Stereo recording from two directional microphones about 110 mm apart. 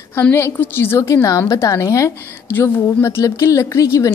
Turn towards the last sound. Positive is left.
turn(degrees=30)  # may be behind; listen again after turning